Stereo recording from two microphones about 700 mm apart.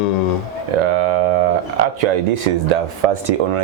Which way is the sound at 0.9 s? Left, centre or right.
Right.